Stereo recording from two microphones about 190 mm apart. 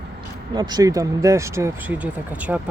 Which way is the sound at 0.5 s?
20° right (ahead or behind).